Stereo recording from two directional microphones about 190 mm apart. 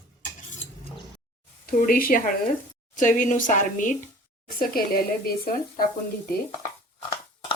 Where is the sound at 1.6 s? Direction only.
50° left (ahead or behind).